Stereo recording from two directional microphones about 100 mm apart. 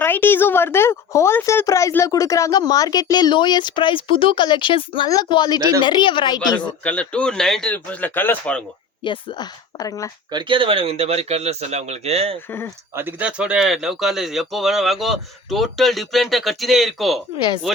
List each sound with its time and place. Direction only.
0.0 s a woman's voice: 20° left (ahead or behind); by 5.0 s 55° left (ahead or behind)
5.0 s speech: 40° left (ahead or behind)
6.6 s speech: 15° left (ahead or behind)
9.0 s speech: 45° left (ahead or behind)
10.3 s speech: 55° right (ahead or behind); by 12.4 s 85° right
12.5 s a woman's voice: 25° left (ahead or behind)
12.9 s speech: 20° right (ahead or behind); by 17.2 s centre (ahead or behind)